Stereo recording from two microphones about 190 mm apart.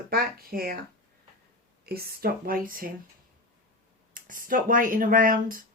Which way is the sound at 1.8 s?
55° right (ahead or behind).